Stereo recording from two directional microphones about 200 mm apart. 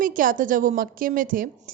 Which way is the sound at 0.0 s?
45° right (ahead or behind).